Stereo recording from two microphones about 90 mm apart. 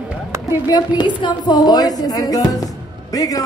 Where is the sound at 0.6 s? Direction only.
50° left (ahead or behind).